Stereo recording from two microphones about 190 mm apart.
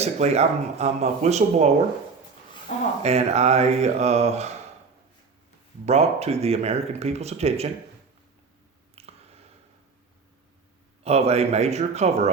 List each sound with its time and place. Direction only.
0.0 s speech: 35° right (ahead or behind)
3.0 s speech: 35° right (ahead or behind)
5.8 s speech: 35° right (ahead or behind)
9.0 s a sound: 30° right (ahead or behind)
11.0 s speech: 35° right (ahead or behind)